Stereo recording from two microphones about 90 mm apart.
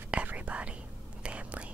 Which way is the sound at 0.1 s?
15° right (ahead or behind).